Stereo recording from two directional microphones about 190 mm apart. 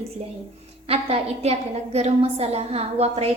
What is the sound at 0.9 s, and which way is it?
A woman's voice, 30° right (ahead or behind).